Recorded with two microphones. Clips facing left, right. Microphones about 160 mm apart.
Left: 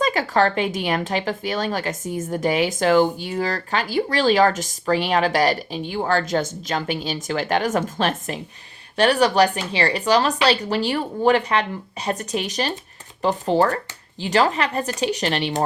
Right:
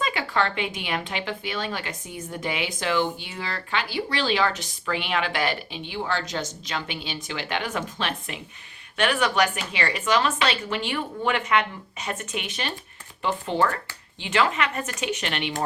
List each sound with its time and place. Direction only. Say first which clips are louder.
0.0 s a woman's voice: left 6 dB; 40° left (ahead or behind)